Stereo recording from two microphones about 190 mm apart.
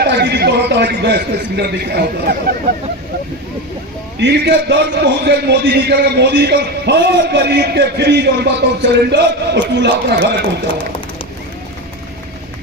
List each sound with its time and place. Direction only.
0.0 s a man's voice: 60° right (ahead or behind)
4.2 s a man's voice: 65° right (ahead or behind)